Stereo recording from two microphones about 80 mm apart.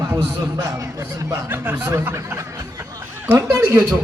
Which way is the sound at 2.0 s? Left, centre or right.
Right.